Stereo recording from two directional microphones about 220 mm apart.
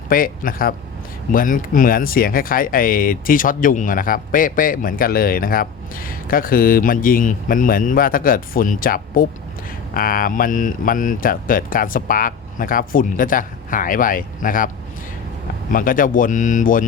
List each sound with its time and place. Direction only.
0.1 s speech: 40° left (ahead or behind)
15.7 s speech: 40° left (ahead or behind)